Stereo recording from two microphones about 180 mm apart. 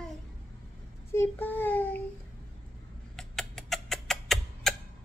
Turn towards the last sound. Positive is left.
turn(degrees=0)  # may be behind; listen again after turning